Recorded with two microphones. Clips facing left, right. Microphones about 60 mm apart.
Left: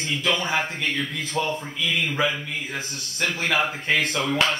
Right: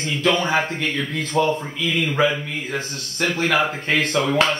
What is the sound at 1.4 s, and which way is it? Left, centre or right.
Speech, right.